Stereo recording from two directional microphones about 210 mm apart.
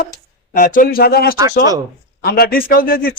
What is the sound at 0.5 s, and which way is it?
Speech, 40° left (ahead or behind).